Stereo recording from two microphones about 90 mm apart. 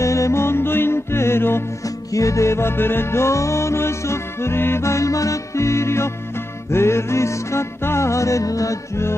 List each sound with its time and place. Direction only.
0.0 s music: 35° left (ahead or behind)